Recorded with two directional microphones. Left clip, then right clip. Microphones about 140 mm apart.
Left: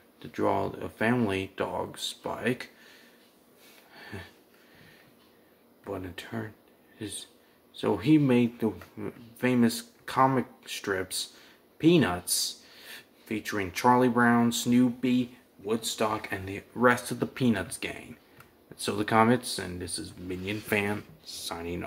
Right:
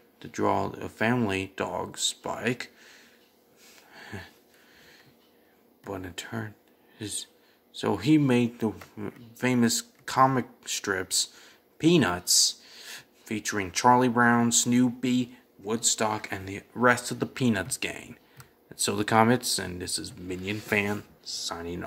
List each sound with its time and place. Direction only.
0.2 s speech: 40° right (ahead or behind)
3.9 s a sound: 35° right (ahead or behind)
5.9 s speech: 45° right (ahead or behind); by 21.8 s 20° right (ahead or behind)